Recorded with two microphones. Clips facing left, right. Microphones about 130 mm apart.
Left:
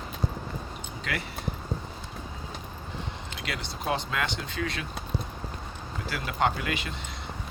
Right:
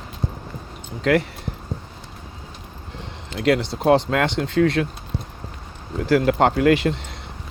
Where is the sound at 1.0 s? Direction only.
90° right.